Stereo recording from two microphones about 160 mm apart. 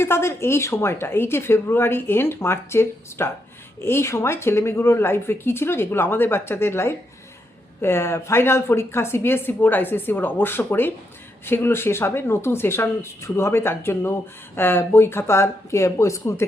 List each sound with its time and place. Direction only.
0.0 s speech: 15° left (ahead or behind)